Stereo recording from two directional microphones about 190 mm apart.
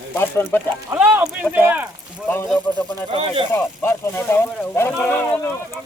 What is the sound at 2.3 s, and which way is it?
Speech, 10° left (ahead or behind).